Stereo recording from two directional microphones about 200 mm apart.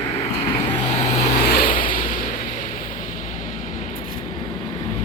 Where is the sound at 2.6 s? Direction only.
40° left (ahead or behind).